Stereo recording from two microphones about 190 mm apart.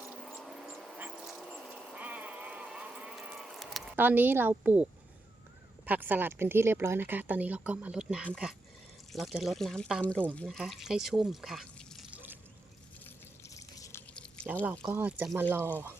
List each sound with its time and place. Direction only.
0.3 s vehicle: centre (ahead or behind)
0.9 s a sound: 5° right (ahead or behind)
5.8 s speech: 10° right (ahead or behind)
13.1 s drip: 15° left (ahead or behind)
14.1 s liquid: 5° left (ahead or behind)
14.8 s speech: 10° right (ahead or behind)